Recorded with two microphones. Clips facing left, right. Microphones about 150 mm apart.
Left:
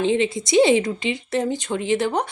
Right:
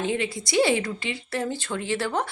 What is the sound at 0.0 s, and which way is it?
Speech, 20° left (ahead or behind).